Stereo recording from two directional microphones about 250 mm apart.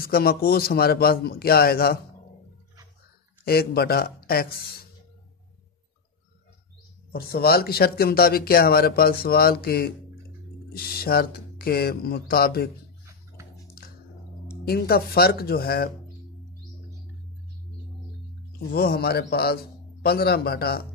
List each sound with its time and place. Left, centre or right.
0.0 s speech: left
3.4 s speech: left
7.1 s speech: left
14.6 s speech: left
18.7 s speech: left